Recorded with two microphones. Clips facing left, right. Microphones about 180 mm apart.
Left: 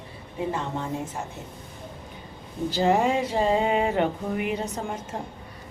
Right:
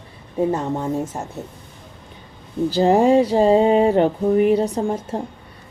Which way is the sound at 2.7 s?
35° right (ahead or behind).